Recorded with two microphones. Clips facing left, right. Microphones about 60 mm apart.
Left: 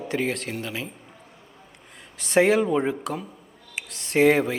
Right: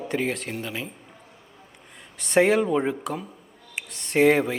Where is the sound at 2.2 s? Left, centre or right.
Centre.